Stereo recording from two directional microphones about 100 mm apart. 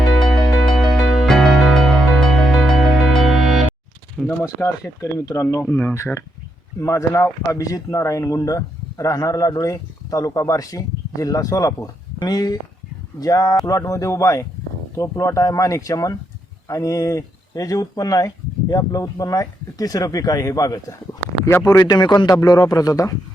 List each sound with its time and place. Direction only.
0.0 s music: 5° left (ahead or behind)
4.4 s speech: 35° left (ahead or behind)